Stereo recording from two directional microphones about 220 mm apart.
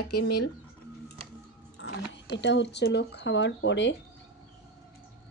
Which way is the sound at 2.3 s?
55° left (ahead or behind).